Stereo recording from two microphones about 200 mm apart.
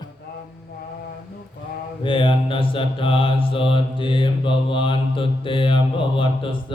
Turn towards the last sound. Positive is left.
turn(degrees=25)  # may be behind; listen again after turning